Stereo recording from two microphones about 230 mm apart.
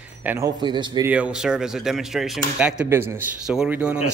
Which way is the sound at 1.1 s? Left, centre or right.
Centre.